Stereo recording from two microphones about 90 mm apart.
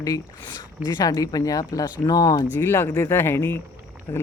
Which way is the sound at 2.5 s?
25° left (ahead or behind).